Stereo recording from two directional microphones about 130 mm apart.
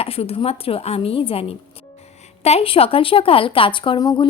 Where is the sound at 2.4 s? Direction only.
50° left (ahead or behind); by 4.2 s 35° left (ahead or behind).